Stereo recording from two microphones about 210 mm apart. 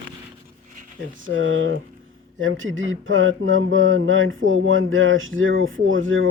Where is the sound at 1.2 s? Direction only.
65° right (ahead or behind).